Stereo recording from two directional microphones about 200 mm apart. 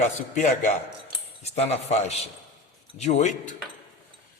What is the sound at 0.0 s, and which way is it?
A man's voice, 40° left (ahead or behind).